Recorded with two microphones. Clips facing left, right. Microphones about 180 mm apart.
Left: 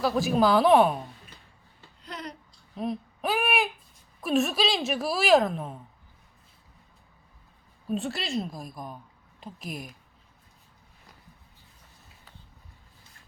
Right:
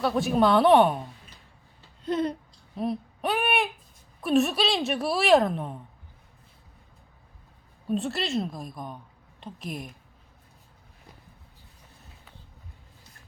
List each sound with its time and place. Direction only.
0.0 s a woman's voice: centre (ahead or behind)
2.0 s babbling: 25° right (ahead or behind)
2.7 s a sound: centre (ahead or behind)
4.2 s a woman's voice: centre (ahead or behind)
7.9 s a woman's voice: centre (ahead or behind)